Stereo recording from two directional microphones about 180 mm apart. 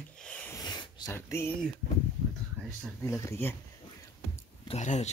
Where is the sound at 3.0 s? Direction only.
15° left (ahead or behind).